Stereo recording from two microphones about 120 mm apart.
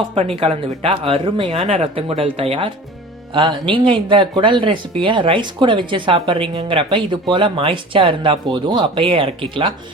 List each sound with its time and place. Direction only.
0.1 s speech: 55° right (ahead or behind)